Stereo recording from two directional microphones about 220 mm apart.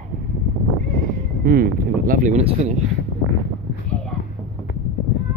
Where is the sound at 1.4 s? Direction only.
40° right (ahead or behind).